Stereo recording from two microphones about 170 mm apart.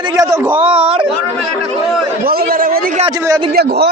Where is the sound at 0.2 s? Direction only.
20° right (ahead or behind).